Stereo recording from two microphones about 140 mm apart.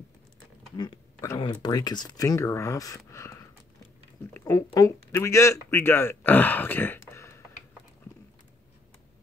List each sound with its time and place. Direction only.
1.4 s speech: 30° left (ahead or behind)
4.5 s speech: 20° left (ahead or behind)